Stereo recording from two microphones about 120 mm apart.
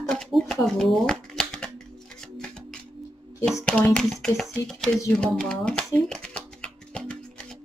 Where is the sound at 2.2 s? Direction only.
5° left (ahead or behind).